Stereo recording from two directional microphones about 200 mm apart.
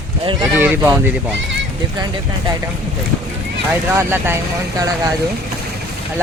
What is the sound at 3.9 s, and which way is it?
Speech, 10° right (ahead or behind).